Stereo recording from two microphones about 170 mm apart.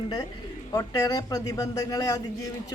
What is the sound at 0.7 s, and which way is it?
A woman's voice, 20° left (ahead or behind).